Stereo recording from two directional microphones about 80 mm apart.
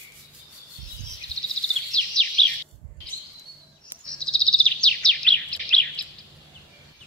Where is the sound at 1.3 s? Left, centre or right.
Right.